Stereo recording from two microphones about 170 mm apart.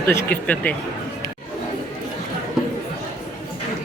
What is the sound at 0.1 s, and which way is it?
Speech, 15° left (ahead or behind).